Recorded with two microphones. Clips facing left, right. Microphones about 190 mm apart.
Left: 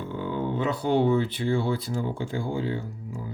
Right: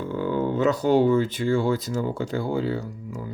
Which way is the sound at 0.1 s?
40° right (ahead or behind).